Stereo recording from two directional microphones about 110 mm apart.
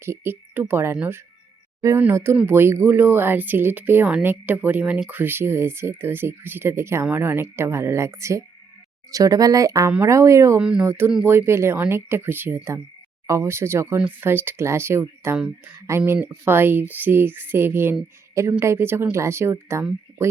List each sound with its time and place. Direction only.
0.0 s speech: 20° right (ahead or behind)
2.3 s speech: 15° right (ahead or behind)
10.6 s speech: 10° right (ahead or behind)
10.8 s speech: 20° right (ahead or behind)
15.4 s speech: 10° right (ahead or behind)
15.9 s speech: 20° right (ahead or behind)